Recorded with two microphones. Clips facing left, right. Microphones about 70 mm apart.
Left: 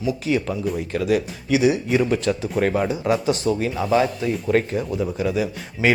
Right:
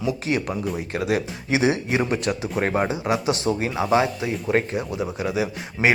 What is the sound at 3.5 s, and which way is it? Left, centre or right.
Speech, right.